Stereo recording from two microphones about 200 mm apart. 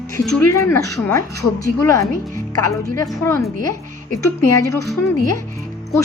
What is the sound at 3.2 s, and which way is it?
A woman's voice, 15° left (ahead or behind).